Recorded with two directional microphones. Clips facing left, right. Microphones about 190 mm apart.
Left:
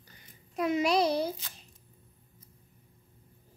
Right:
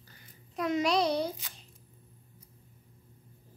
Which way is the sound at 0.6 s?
5° left (ahead or behind).